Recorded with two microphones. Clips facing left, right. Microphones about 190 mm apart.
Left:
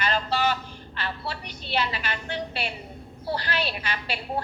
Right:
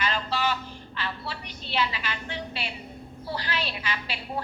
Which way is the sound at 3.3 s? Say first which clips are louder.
Left 3 dB; 50° left (ahead or behind).